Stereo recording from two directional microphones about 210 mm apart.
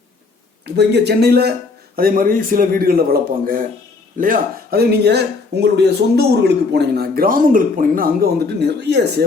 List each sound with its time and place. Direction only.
0.6 s speech: 50° right (ahead or behind)